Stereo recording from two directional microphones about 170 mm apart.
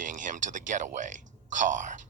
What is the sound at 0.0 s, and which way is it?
Speech, 50° right (ahead or behind).